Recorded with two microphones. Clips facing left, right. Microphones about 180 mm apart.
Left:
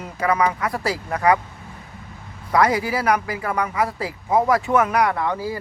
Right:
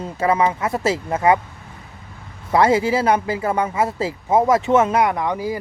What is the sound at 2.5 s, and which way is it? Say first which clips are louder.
Speech: right 3 dB; 25° right (ahead or behind).